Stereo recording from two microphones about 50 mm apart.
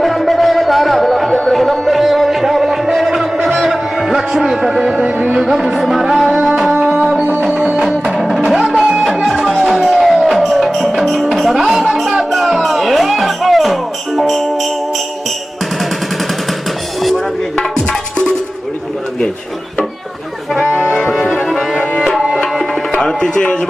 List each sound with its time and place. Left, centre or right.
0.0 s music: centre
5.0 s music: right
5.4 s music: centre
7.7 s music: centre
17.6 s tabla: centre
21.3 s brass instrument: centre
23.0 s tabla: centre